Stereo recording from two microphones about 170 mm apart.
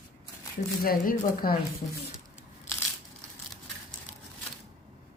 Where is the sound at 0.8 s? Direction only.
55° left (ahead or behind).